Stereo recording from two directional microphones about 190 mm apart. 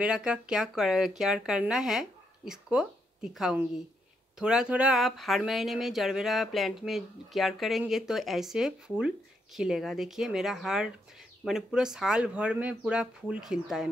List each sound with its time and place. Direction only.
0.0 s speech: 5° right (ahead or behind)